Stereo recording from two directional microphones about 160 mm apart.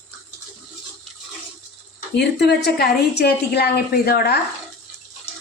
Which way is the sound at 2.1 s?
90° left.